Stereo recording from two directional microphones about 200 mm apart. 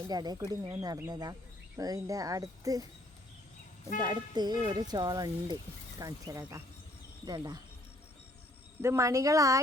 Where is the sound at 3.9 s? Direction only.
20° right (ahead or behind).